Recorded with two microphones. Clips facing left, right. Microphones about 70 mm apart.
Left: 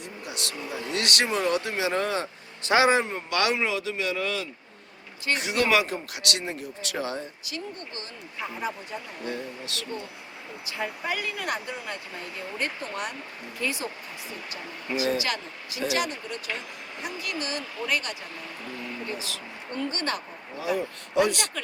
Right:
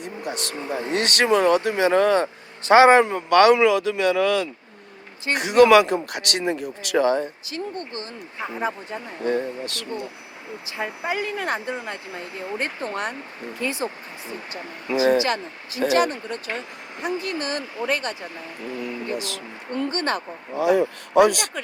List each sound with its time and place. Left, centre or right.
0.0 s speech: right
1.3 s speech: right
3.2 s speech: right
3.6 s speech: right
5.3 s speech: right
5.6 s speech: right
7.5 s speech: right
19.7 s speech: right
20.6 s speech: right